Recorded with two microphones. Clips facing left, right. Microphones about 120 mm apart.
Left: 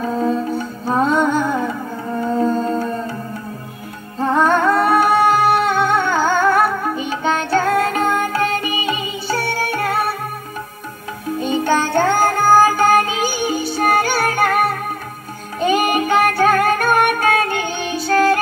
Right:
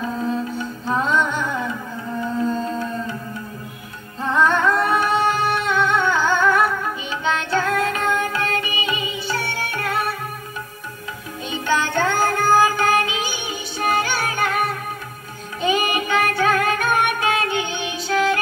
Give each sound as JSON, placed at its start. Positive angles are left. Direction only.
{"t": 0.8, "sound": "music", "side_deg": 40}
{"t": 4.3, "sound": "music", "side_deg": 45}
{"t": 11.3, "sound": "music", "side_deg": 45}